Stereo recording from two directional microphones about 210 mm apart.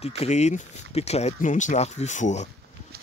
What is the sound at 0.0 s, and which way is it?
Speech, 30° left (ahead or behind).